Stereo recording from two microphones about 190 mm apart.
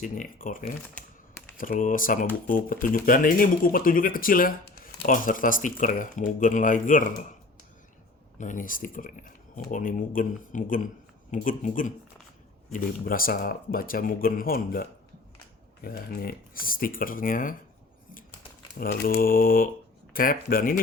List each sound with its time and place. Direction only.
0.0 s speech: 45° left (ahead or behind)
8.4 s speech: 45° left (ahead or behind)
18.8 s speech: 50° left (ahead or behind)